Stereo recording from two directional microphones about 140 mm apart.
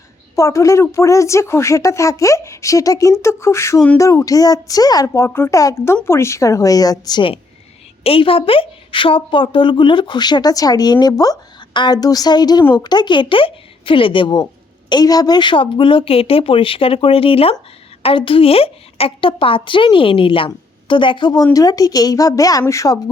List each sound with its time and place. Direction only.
0.3 s a woman's voice: 25° left (ahead or behind)